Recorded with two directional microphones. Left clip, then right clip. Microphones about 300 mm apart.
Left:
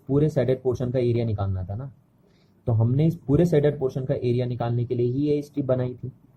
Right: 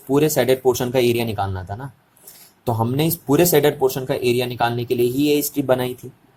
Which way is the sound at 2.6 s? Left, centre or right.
Right.